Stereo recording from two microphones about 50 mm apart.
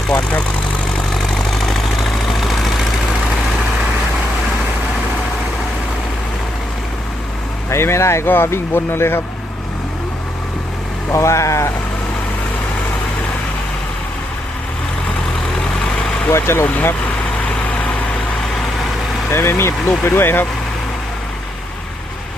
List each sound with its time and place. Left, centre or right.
0.1 s speech: left
0.9 s vehicle: centre
7.7 s speech: left
8.3 s speech: left
11.1 s speech: left
16.3 s speech: left
19.3 s speech: left